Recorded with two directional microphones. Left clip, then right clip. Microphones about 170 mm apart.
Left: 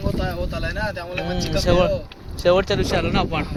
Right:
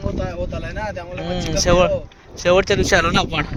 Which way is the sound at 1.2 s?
65° right (ahead or behind).